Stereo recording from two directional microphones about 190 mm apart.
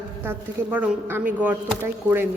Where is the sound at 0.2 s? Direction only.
10° right (ahead or behind).